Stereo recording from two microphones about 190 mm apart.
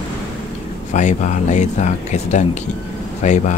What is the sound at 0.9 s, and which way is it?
Speech, 40° left (ahead or behind).